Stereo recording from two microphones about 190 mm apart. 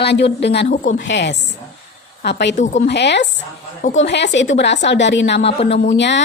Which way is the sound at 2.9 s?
65° left (ahead or behind).